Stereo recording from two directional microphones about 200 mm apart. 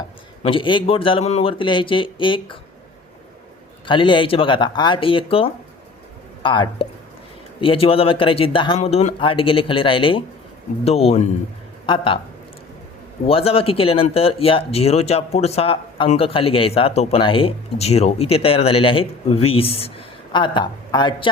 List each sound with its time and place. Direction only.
0.4 s speech: 25° left (ahead or behind)
3.8 s speech: 25° left (ahead or behind)
13.2 s speech: 30° left (ahead or behind)